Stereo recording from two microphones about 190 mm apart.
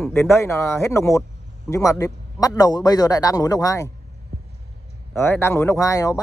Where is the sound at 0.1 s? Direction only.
15° left (ahead or behind).